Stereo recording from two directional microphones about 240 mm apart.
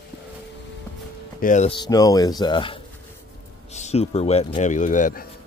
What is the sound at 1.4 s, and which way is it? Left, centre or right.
Speech, left.